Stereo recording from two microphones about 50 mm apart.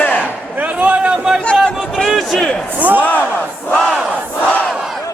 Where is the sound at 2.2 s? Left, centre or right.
Centre.